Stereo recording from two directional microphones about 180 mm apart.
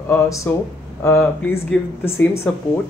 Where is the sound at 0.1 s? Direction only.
15° left (ahead or behind).